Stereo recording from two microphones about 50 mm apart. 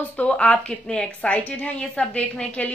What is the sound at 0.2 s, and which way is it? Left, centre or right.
A woman's voice, left.